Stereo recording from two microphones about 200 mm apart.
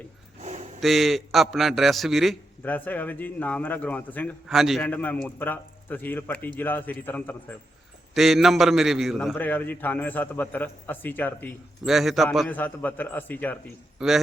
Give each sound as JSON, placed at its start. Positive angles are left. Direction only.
{"t": 0.4, "sound": "a sound", "side_deg": -35}
{"t": 0.8, "sound": "a man's voice", "side_deg": 0}
{"t": 14.0, "sound": "a man's voice", "side_deg": 0}